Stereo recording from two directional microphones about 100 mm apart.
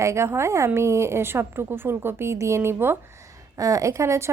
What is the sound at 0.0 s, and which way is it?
A woman's voice, 30° right (ahead or behind).